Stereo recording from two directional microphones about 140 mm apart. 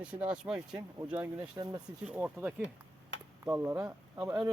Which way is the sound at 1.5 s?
30° right (ahead or behind).